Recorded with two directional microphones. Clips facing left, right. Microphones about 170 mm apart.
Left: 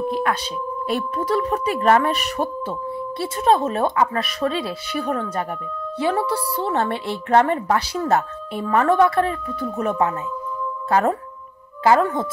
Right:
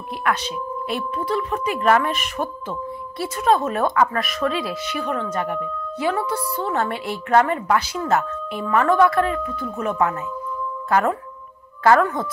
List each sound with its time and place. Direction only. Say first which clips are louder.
0.8 s speech: left 3 dB; 40° left (ahead or behind)